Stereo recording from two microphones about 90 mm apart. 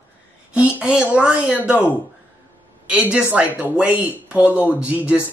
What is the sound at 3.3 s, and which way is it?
Speech, 20° right (ahead or behind).